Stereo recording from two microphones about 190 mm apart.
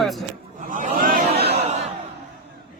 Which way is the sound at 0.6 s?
45° right (ahead or behind).